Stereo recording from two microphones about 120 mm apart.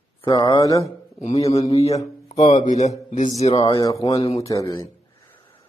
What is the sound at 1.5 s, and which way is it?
A man's voice, 60° left (ahead or behind).